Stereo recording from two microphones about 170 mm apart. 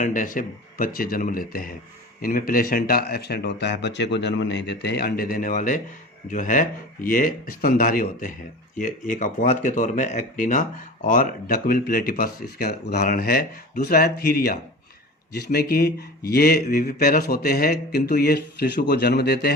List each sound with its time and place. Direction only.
0.0 s speech: 50° left (ahead or behind); by 19.5 s 70° left (ahead or behind)